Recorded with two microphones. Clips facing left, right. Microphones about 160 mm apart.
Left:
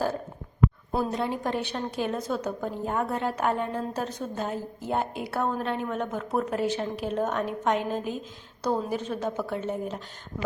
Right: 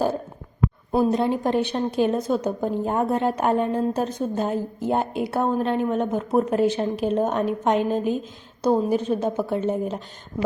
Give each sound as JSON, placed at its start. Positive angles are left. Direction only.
{"t": 0.9, "sound": "a woman's voice", "side_deg": -25}
{"t": 2.8, "sound": "a woman's voice", "side_deg": -30}